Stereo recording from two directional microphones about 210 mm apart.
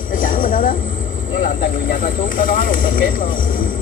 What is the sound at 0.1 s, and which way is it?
Vehicle, 40° left (ahead or behind).